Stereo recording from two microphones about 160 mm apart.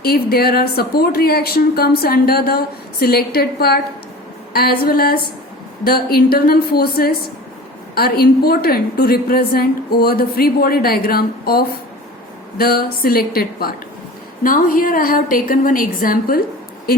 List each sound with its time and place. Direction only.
0.0 s a woman's voice: 75° left (ahead or behind)